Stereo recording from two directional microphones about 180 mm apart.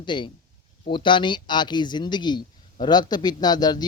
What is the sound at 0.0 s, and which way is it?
Speech, 25° left (ahead or behind).